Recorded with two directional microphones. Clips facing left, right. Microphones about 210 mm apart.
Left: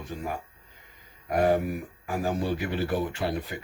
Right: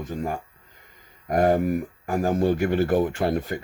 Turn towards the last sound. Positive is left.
turn(degrees=-50)  # may be behind; listen again after turning